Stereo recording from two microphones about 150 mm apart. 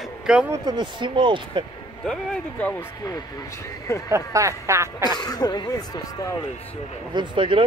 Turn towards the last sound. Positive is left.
turn(degrees=-35)  # may be behind; listen again after turning